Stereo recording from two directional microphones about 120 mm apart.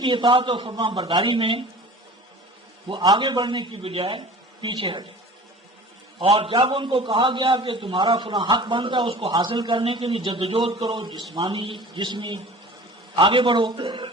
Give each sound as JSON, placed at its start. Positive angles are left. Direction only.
{"t": 0.0, "sound": "a man's voice", "side_deg": -40}
{"t": 2.9, "sound": "a man's voice", "side_deg": -40}
{"t": 6.1, "sound": "a man's voice", "side_deg": -45}